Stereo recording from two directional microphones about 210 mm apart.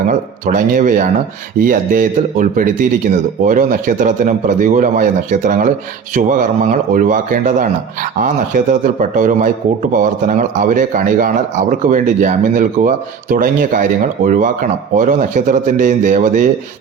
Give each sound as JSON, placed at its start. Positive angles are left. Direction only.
{"t": 0.1, "sound": "speech", "side_deg": -40}